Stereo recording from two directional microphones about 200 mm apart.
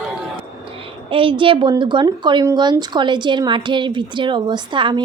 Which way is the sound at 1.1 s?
25° right (ahead or behind).